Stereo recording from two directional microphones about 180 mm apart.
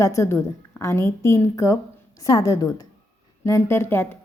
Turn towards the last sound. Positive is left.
turn(degrees=15)  # may be behind; listen again after turning